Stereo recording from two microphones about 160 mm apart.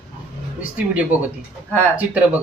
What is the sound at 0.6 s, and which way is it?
Speech, 10° right (ahead or behind).